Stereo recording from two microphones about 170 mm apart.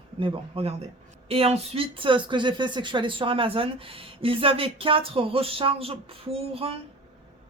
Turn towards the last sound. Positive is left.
turn(degrees=-35)  # may be behind; listen again after turning